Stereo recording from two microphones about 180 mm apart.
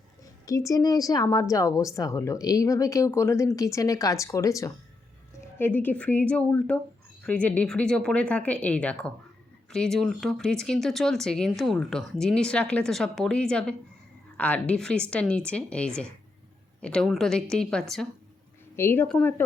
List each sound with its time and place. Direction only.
0.4 s a woman's voice: 20° left (ahead or behind); by 18.1 s centre (ahead or behind)
18.8 s a woman's voice: 15° left (ahead or behind)